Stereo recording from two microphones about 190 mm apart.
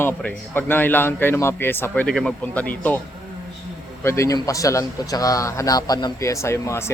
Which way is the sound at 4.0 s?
15° left (ahead or behind).